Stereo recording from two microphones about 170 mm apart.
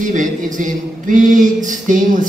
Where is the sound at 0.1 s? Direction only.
50° right (ahead or behind).